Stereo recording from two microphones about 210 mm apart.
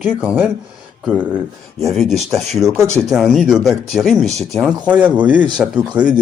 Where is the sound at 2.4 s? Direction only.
Centre (ahead or behind).